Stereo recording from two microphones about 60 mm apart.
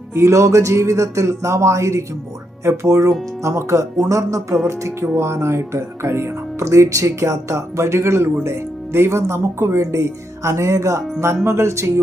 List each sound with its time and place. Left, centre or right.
0.1 s speech: right